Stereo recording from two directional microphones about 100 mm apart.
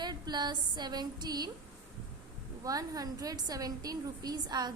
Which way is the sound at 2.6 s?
40° right (ahead or behind).